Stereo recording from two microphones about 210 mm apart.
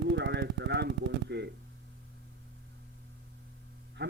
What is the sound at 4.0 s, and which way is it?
Music, 50° right (ahead or behind).